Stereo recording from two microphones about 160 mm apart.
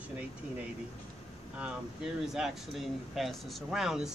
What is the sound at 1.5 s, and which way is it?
Speech, 5° right (ahead or behind).